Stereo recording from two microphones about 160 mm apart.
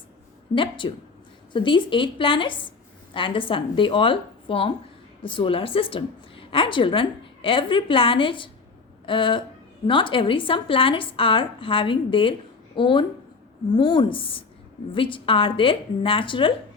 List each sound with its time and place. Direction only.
0.5 s a woman's voice: 30° left (ahead or behind)